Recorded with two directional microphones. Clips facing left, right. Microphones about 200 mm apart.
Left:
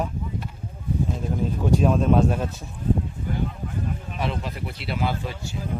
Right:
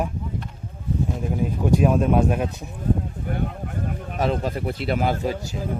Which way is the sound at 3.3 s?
55° right (ahead or behind).